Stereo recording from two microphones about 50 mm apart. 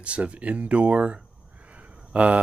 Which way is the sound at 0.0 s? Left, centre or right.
Right.